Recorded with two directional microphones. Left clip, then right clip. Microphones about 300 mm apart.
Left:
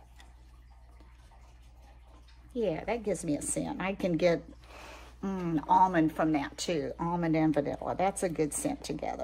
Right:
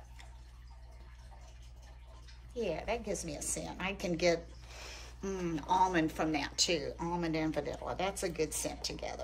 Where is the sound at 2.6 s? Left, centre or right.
Centre.